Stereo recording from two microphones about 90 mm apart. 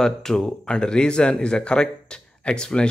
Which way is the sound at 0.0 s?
5° left (ahead or behind).